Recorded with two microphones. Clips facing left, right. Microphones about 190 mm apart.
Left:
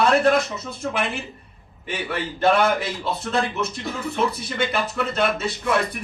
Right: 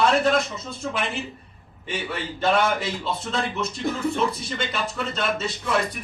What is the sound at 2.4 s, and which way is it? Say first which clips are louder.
Speech: left 3 dB; 60° left (ahead or behind).